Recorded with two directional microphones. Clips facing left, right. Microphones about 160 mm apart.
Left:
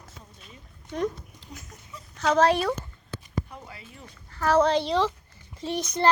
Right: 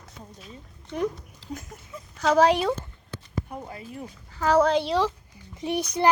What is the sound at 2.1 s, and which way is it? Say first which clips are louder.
Speech: right 2 dB; 10° right (ahead or behind).